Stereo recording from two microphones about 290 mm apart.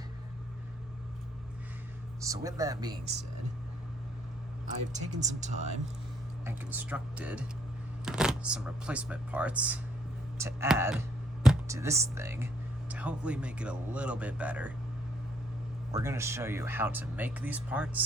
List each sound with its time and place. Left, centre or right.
2.2 s speech: centre
4.9 s speech: right
6.4 s speech: centre
11.4 s music: centre
12.1 s speech: centre
15.9 s speech: centre